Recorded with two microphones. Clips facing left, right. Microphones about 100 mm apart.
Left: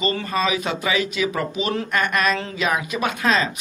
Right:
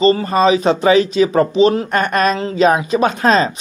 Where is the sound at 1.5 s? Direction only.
30° right (ahead or behind).